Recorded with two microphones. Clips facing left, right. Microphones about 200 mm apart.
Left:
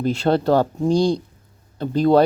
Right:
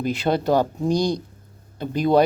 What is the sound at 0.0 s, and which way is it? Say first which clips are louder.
Speech: left 3 dB; 15° right (ahead or behind).